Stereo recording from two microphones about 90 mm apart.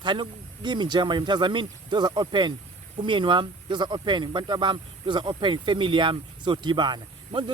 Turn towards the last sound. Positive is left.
turn(degrees=-60)  # may be behind; listen again after turning